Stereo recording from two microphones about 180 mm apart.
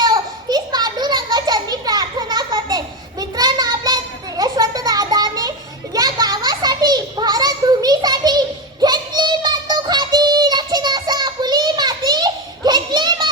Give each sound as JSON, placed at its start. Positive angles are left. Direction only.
{"t": 0.0, "sound": "children playing", "side_deg": -20}